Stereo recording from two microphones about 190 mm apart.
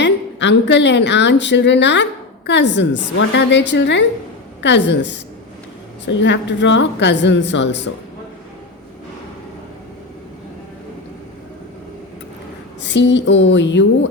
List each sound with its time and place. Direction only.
0.0 s a woman's voice: 70° left (ahead or behind)
12.8 s a woman's voice: 70° left (ahead or behind)